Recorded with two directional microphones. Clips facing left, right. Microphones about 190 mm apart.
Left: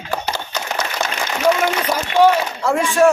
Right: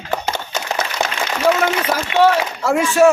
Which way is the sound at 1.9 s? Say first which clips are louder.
Left 2 dB; 5° right (ahead or behind).